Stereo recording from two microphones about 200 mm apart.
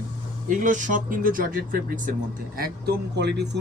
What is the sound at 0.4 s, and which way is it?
Speech, 40° right (ahead or behind).